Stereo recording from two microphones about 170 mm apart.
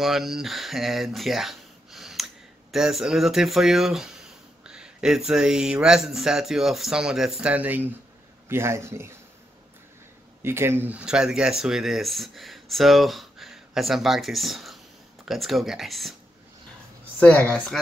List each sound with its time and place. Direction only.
0.0 s speech: centre (ahead or behind)
10.4 s speech: 15° right (ahead or behind)
17.2 s speech: 10° left (ahead or behind)